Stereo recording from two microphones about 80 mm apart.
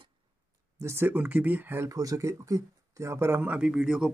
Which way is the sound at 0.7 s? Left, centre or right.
Right.